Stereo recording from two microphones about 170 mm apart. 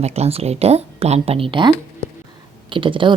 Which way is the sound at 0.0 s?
35° right (ahead or behind).